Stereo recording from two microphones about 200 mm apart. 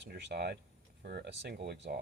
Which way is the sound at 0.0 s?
60° right (ahead or behind).